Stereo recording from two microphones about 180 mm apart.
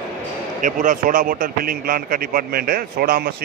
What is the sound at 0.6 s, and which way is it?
A man's voice, 45° right (ahead or behind).